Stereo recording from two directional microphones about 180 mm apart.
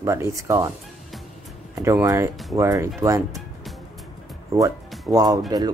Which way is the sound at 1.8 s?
15° right (ahead or behind).